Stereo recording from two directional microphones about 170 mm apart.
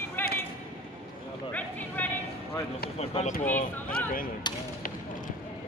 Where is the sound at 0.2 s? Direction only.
10° left (ahead or behind).